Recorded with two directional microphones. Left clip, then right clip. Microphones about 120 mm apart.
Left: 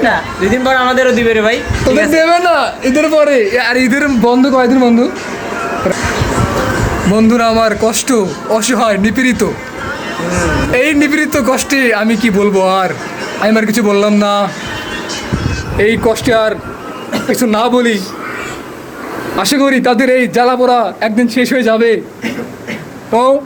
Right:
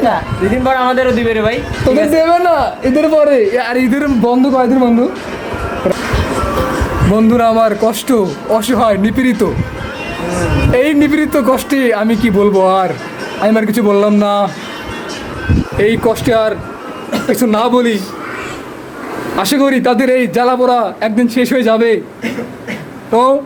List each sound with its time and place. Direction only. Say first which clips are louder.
0.0 s speech: left 1 dB; 10° right (ahead or behind)
2.1 s a man's voice: left 1 dB; 35° right (ahead or behind)
4.2 s a man's voice: left 1 dB; 10° right (ahead or behind)
7.1 s a man's voice: even; 30° right (ahead or behind)
10.7 s a man's voice: right 1 dB; 40° right (ahead or behind)
15.8 s a man's voice: left 1 dB; 15° right (ahead or behind)
17.2 s a man's voice: even; 25° right (ahead or behind)
19.4 s a man's voice: left 1 dB; 25° right (ahead or behind); by 21.1 s 10° right (ahead or behind)
21.2 s a man's voice: even; 25° right (ahead or behind)
23.1 s a man's voice: even; 20° right (ahead or behind)